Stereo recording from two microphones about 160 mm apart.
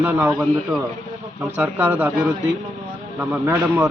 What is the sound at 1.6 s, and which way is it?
A man's voice, 10° right (ahead or behind).